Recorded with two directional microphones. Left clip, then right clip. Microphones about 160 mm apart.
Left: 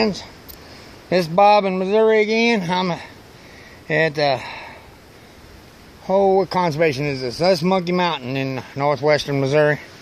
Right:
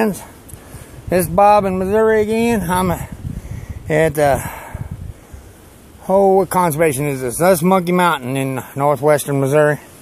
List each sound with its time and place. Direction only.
1.0 s speech: 10° right (ahead or behind)
2.8 s speech: 25° right (ahead or behind)
6.3 s speech: 25° right (ahead or behind)
6.6 s speech: 10° right (ahead or behind)